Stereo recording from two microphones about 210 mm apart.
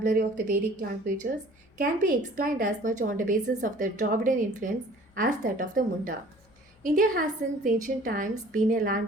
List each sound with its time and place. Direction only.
0.0 s a woman's voice: 40° right (ahead or behind)